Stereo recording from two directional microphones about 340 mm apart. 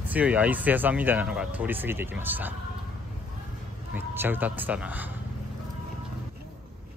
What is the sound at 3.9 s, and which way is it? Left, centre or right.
Speech, centre.